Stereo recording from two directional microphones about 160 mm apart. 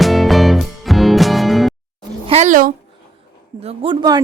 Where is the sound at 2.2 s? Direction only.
45° right (ahead or behind).